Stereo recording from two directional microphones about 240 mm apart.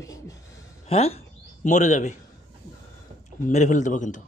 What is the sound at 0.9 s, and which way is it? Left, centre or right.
Speech, left.